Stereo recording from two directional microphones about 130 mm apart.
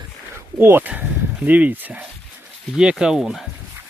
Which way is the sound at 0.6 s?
15° right (ahead or behind).